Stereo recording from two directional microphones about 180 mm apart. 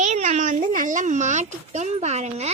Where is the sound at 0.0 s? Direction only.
40° right (ahead or behind).